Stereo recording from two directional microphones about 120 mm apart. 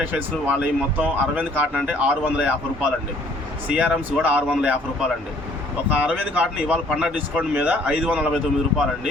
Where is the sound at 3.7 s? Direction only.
10° right (ahead or behind).